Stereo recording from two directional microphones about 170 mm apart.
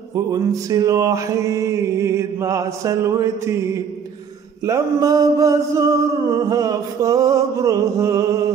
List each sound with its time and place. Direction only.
0.1 s music: 20° right (ahead or behind)
4.6 s mantra: 20° right (ahead or behind)